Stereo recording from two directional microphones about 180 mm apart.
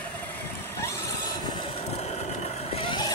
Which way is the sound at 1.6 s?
35° left (ahead or behind).